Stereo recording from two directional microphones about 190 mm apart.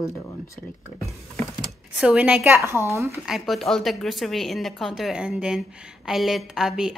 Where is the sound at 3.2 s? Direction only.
Centre (ahead or behind).